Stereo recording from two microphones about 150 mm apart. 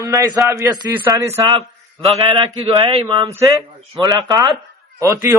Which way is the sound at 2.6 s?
35° right (ahead or behind).